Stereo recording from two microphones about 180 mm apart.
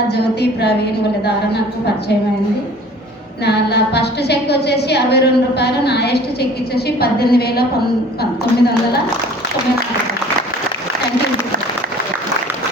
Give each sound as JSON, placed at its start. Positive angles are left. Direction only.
{"t": 0.1, "sound": "a woman's voice", "side_deg": 65}
{"t": 3.4, "sound": "a woman's voice", "side_deg": 65}